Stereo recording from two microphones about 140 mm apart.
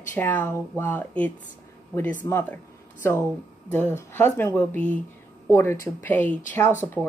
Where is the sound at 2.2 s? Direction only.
25° left (ahead or behind).